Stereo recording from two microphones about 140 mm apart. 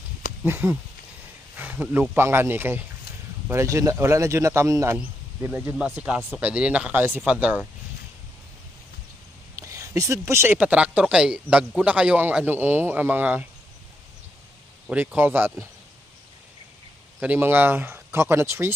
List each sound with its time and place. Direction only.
0.4 s speech: 15° right (ahead or behind)
4.9 s speech: 10° right (ahead or behind)
9.6 s speech: 25° right (ahead or behind)
14.8 s speech: 15° right (ahead or behind)
17.2 s speech: 10° right (ahead or behind)